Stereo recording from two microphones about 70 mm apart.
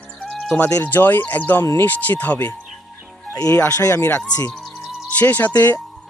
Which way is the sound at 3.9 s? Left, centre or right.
Left.